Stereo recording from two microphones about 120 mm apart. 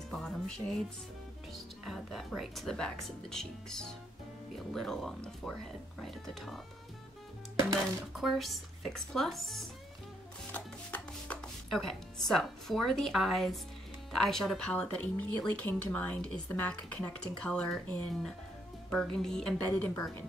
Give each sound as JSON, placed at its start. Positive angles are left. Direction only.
{"t": 0.1, "sound": "speech", "side_deg": 5}
{"t": 8.2, "sound": "speech", "side_deg": 0}
{"t": 10.5, "sound": "music", "side_deg": 10}
{"t": 14.1, "sound": "speech", "side_deg": 5}
{"t": 19.6, "sound": "speech", "side_deg": 15}